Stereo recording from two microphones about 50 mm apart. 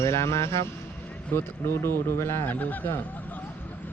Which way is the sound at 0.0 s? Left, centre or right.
Left.